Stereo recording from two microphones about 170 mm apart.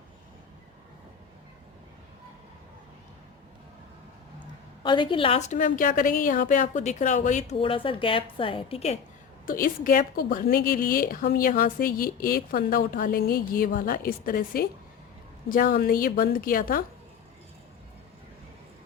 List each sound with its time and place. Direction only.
4.8 s a woman's voice: 30° left (ahead or behind); by 7.5 s 45° left (ahead or behind)
7.6 s a woman's voice: 30° left (ahead or behind)
9.5 s a woman's voice: 55° left (ahead or behind)